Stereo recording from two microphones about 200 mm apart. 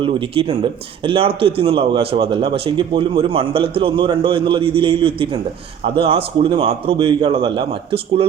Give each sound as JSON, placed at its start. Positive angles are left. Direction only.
{"t": 0.0, "sound": "speech", "side_deg": -25}